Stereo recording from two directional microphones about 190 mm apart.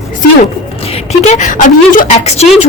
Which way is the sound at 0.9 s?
35° left (ahead or behind).